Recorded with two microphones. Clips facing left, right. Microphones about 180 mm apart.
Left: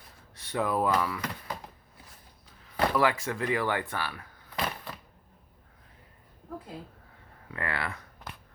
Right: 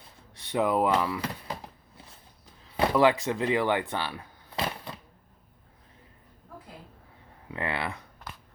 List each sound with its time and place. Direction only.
0.5 s speech: 20° right (ahead or behind)
2.7 s speech: 20° right (ahead or behind)
7.4 s a sound: 20° right (ahead or behind)